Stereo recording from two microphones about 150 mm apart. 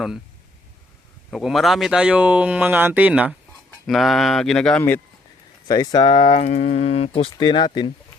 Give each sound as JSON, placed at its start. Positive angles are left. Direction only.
{"t": 1.3, "sound": "speech", "side_deg": 0}
{"t": 5.6, "sound": "speech", "side_deg": 30}
{"t": 6.4, "sound": "speech", "side_deg": 50}